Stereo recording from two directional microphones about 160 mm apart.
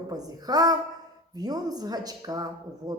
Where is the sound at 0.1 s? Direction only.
25° right (ahead or behind).